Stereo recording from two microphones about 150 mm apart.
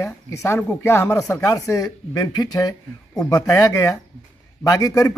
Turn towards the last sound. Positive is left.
turn(degrees=25)  # may be behind; listen again after turning